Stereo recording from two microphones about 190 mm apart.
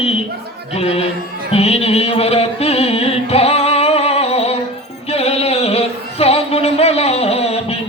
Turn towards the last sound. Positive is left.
turn(degrees=30)  # may be behind; listen again after turning